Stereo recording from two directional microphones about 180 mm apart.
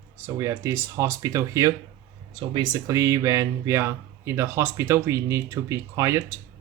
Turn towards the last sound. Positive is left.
turn(degrees=-15)  # may be behind; listen again after turning